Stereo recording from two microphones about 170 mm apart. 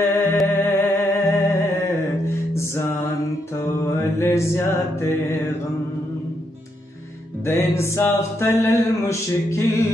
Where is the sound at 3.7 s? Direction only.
15° left (ahead or behind).